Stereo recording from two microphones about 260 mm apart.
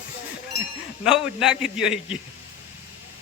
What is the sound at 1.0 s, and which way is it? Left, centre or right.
Speech, centre.